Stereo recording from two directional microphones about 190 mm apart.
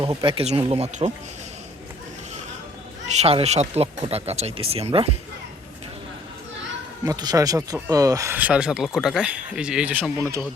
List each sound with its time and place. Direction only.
0.0 s speech: 25° right (ahead or behind)
3.2 s speech: 35° right (ahead or behind)
7.0 s speech: 20° right (ahead or behind)